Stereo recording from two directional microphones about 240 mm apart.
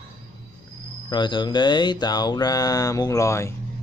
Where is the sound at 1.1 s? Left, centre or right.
Centre.